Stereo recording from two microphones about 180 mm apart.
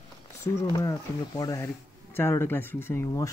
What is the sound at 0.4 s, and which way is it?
Speech, 15° left (ahead or behind).